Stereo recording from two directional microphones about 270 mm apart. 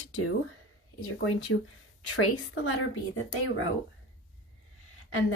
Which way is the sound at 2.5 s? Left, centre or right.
Left.